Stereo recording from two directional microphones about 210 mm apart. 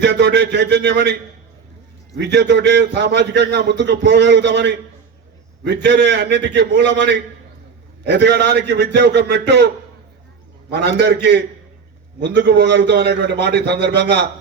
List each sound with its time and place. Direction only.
0.0 s a man's voice: 55° right (ahead or behind)
2.1 s a man's voice: 55° right (ahead or behind)